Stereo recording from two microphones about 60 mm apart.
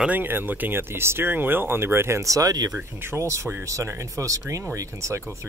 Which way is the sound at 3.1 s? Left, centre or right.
Right.